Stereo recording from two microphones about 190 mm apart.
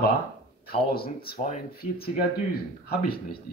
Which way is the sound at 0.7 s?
55° left (ahead or behind).